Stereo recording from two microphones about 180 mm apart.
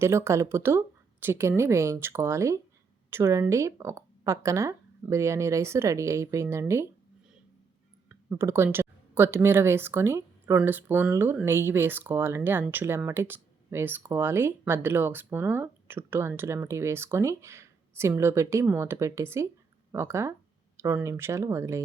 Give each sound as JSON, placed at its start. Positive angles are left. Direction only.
{"t": 0.0, "sound": "speech", "side_deg": -15}
{"t": 8.3, "sound": "speech", "side_deg": -15}